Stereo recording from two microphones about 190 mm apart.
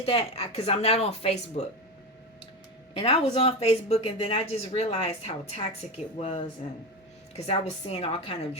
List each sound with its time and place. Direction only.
0.0 s speech: 30° left (ahead or behind)
2.9 s speech: 30° left (ahead or behind)